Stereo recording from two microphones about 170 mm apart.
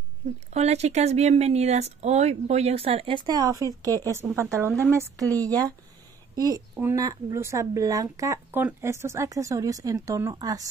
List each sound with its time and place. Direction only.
0.5 s a woman's voice: 40° right (ahead or behind); by 10.7 s 20° right (ahead or behind)